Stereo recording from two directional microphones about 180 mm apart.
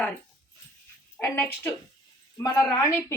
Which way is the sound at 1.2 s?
10° left (ahead or behind).